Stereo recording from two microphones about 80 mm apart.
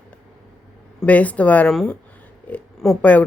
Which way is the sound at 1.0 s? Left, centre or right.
Centre.